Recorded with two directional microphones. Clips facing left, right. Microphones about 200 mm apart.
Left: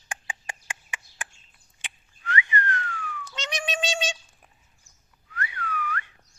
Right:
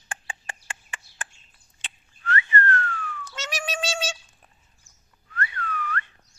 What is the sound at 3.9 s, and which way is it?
Cat, centre (ahead or behind).